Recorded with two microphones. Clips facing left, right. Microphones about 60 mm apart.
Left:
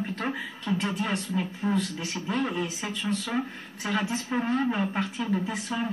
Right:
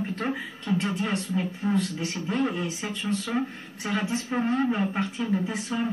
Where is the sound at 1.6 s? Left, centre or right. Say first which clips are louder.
Right 1 dB; centre.